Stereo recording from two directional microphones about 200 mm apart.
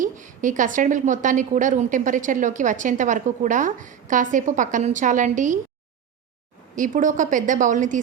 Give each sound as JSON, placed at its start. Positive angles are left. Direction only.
{"t": 0.0, "sound": "a woman's voice", "side_deg": -40}
{"t": 6.7, "sound": "a woman's voice", "side_deg": -40}